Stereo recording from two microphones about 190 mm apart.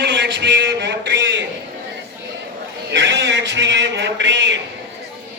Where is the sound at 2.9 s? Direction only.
70° right (ahead or behind).